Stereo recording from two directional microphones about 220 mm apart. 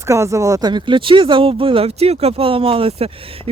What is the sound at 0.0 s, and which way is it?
Speech, 15° right (ahead or behind).